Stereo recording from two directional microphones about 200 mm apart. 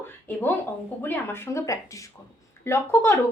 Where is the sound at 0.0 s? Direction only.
10° left (ahead or behind).